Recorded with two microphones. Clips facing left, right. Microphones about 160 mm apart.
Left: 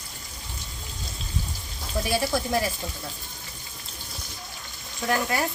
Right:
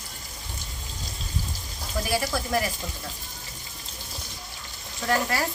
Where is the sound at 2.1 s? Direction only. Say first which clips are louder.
Left 1 dB; 25° left (ahead or behind).